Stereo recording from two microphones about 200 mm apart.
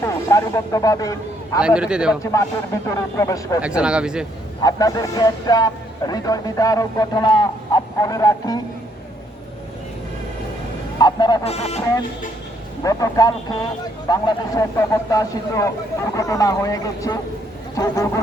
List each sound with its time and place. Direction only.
0.0 s speech: 15° left (ahead or behind)
1.6 s speech: 5° right (ahead or behind)
2.8 s speech: 15° left (ahead or behind)
3.6 s speech: 5° right (ahead or behind)
4.6 s speech: 20° left (ahead or behind)
10.9 s speech: 20° left (ahead or behind)
11.8 s speech: 15° left (ahead or behind)